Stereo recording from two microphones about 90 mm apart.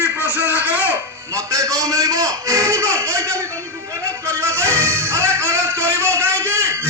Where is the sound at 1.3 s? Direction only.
35° right (ahead or behind).